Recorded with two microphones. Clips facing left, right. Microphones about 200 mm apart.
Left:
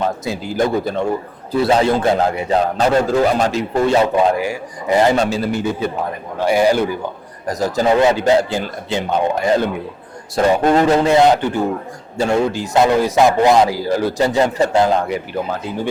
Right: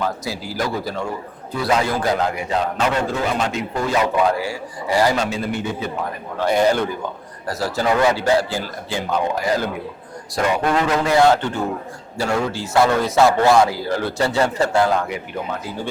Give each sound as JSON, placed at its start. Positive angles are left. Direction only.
{"t": 0.0, "sound": "a man's voice", "side_deg": 25}
{"t": 6.4, "sound": "a man's voice", "side_deg": 10}
{"t": 12.1, "sound": "a man's voice", "side_deg": 25}
{"t": 15.0, "sound": "speech", "side_deg": 35}